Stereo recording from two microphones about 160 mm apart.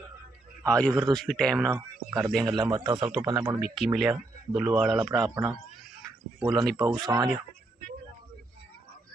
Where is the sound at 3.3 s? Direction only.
25° right (ahead or behind).